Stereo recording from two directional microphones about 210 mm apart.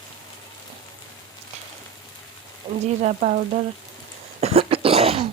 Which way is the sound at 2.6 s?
25° right (ahead or behind).